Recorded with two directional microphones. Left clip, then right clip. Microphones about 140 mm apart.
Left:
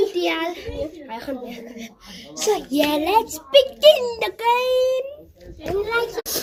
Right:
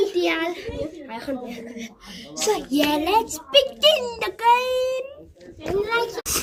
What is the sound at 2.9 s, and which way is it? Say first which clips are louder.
A child's voice: left 2 dB; 35° right (ahead or behind).